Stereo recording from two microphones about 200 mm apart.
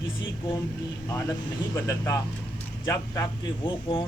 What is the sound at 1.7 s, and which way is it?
Speech, 15° left (ahead or behind).